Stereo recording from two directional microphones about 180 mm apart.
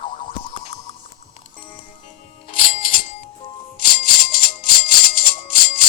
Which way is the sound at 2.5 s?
50° left (ahead or behind).